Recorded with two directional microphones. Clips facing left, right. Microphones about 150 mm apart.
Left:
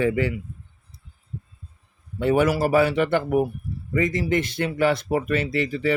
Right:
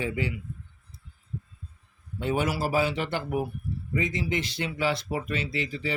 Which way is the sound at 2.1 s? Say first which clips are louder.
Left 8 dB; 60° left (ahead or behind).